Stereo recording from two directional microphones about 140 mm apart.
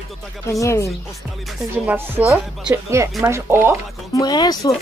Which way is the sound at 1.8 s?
15° right (ahead or behind).